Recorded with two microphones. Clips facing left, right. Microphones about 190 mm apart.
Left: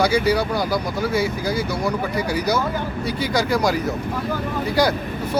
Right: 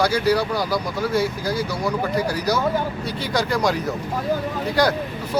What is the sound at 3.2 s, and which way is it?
Speech, 10° left (ahead or behind).